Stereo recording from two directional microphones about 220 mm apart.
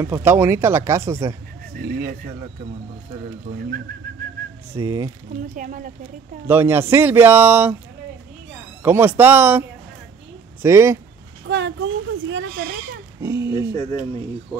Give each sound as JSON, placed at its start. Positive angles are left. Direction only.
{"t": 0.0, "sound": "speech", "side_deg": -10}
{"t": 4.7, "sound": "speech", "side_deg": -15}
{"t": 5.6, "sound": "a woman's voice", "side_deg": -35}
{"t": 6.4, "sound": "speech", "side_deg": -10}
{"t": 8.8, "sound": "speech", "side_deg": -10}
{"t": 11.4, "sound": "speech", "side_deg": -50}
{"t": 13.2, "sound": "speech", "side_deg": -15}